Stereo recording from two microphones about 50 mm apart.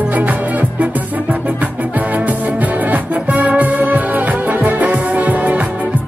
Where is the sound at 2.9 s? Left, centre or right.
Right.